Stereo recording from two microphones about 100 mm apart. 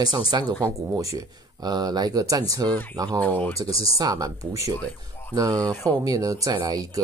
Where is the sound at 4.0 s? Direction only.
40° right (ahead or behind).